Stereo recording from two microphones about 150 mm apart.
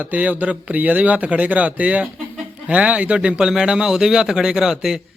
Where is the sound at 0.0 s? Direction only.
10° right (ahead or behind).